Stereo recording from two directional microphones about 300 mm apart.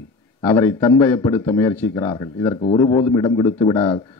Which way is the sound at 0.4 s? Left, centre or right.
Centre.